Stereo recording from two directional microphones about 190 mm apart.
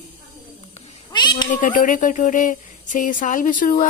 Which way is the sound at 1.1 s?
25° left (ahead or behind).